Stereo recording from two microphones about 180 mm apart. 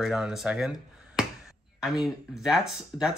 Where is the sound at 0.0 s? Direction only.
5° right (ahead or behind).